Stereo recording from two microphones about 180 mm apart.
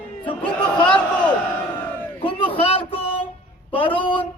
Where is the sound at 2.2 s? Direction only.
30° left (ahead or behind).